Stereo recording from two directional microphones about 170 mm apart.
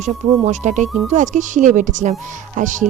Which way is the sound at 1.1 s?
45° right (ahead or behind).